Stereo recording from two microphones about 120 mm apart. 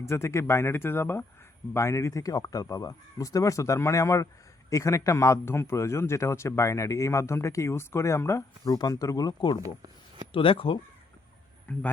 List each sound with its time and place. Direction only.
0.0 s a man's voice: 25° left (ahead or behind)
9.6 s speech: 30° right (ahead or behind)
10.3 s speech: 50° left (ahead or behind)